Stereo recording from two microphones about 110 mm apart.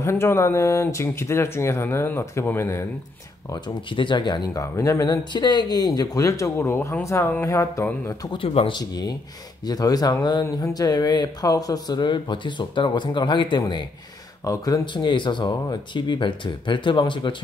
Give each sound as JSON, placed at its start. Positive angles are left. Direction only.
{"t": 0.0, "sound": "speech", "side_deg": 25}
{"t": 3.4, "sound": "speech", "side_deg": 45}
{"t": 4.7, "sound": "speech", "side_deg": 30}
{"t": 8.4, "sound": "speech", "side_deg": 55}
{"t": 8.7, "sound": "speech", "side_deg": 35}